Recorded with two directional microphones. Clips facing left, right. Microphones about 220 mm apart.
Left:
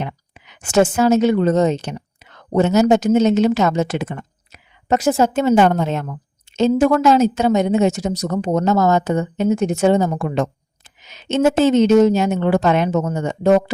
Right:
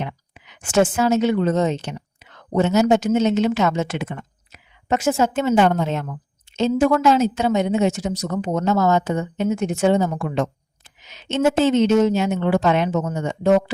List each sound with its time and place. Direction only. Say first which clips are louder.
0.0 s a woman's voice: left 2 dB; 40° left (ahead or behind)